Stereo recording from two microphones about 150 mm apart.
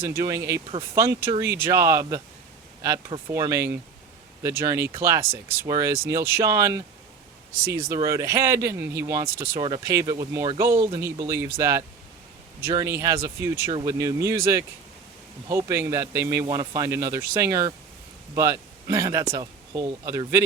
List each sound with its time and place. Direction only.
0.0 s speech: 20° right (ahead or behind)
12.8 s speech: 20° right (ahead or behind)